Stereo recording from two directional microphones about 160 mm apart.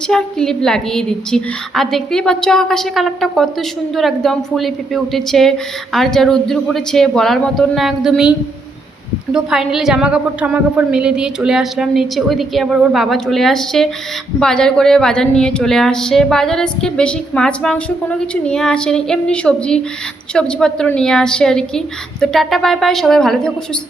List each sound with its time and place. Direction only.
0.1 s a woman's voice: 5° left (ahead or behind)